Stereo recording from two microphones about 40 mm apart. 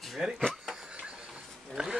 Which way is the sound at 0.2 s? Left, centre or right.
Centre.